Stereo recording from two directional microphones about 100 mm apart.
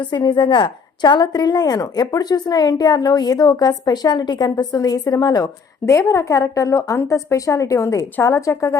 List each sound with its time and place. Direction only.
0.0 s a woman's voice: 50° left (ahead or behind); by 8.8 s 30° left (ahead or behind)